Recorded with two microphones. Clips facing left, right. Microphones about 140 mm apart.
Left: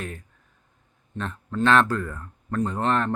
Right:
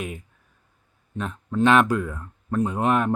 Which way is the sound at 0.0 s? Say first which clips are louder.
Right 3 dB; 15° right (ahead or behind).